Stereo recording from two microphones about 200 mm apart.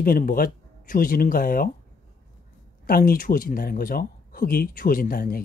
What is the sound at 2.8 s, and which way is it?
Speech, 45° left (ahead or behind).